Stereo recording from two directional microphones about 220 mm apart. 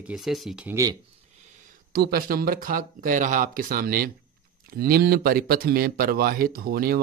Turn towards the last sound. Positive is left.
turn(degrees=-40)  # may be behind; listen again after turning